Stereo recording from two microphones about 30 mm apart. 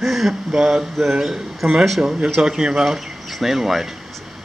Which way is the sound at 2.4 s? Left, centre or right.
Right.